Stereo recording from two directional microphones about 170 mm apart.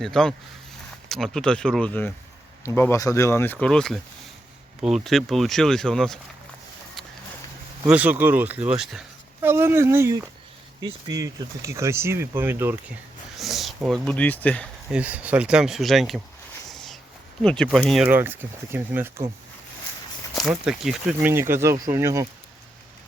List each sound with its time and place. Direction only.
0.0 s speech: 5° left (ahead or behind)
7.9 s speech: 10° right (ahead or behind)
13.3 s speech: centre (ahead or behind)
14.9 s speech: 10° right (ahead or behind)
16.6 s a sound: centre (ahead or behind)
17.4 s speech: 5° left (ahead or behind)
18.0 s speech: 10° right (ahead or behind)
20.5 s speech: 5° right (ahead or behind); by 22.3 s 20° right (ahead or behind)